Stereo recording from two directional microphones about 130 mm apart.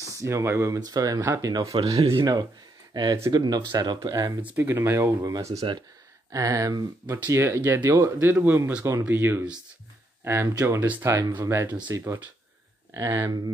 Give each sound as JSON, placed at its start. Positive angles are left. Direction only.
{"t": 0.0, "sound": "speech", "side_deg": -25}
{"t": 1.2, "sound": "speech", "side_deg": -15}
{"t": 1.8, "sound": "speech", "side_deg": -50}
{"t": 2.9, "sound": "speech", "side_deg": -30}
{"t": 4.4, "sound": "speech", "side_deg": -15}
{"t": 5.6, "sound": "speech", "side_deg": -40}
{"t": 6.3, "sound": "speech", "side_deg": -25}